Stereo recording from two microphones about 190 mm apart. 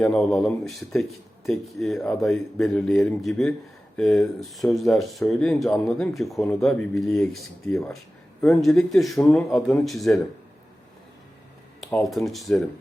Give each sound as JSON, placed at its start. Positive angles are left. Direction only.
{"t": 0.0, "sound": "speech", "side_deg": 5}
{"t": 12.0, "sound": "speech", "side_deg": 0}